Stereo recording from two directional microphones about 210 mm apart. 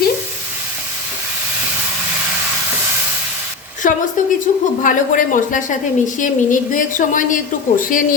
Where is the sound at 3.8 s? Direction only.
40° left (ahead or behind).